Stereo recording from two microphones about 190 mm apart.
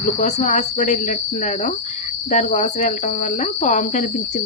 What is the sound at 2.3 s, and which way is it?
Cricket, 40° left (ahead or behind).